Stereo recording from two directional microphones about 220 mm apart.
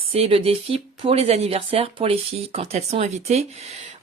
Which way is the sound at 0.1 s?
25° right (ahead or behind).